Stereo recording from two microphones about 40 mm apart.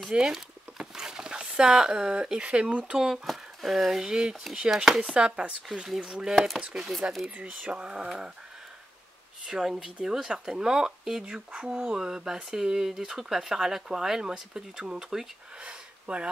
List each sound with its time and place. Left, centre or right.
0.1 s speech: centre; by 3.0 s right
3.3 s speech: centre
4.0 s speech: centre
6.9 s speech: centre
7.2 s speech: right
9.5 s speech: centre
15.6 s a sound: right